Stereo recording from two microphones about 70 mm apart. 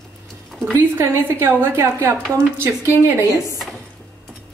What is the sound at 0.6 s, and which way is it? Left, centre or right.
A woman's voice, right.